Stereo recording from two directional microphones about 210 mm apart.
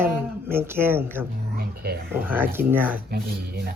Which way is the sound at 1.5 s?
45° right (ahead or behind).